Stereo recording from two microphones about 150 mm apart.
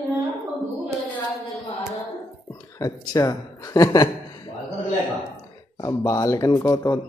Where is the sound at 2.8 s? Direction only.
25° left (ahead or behind).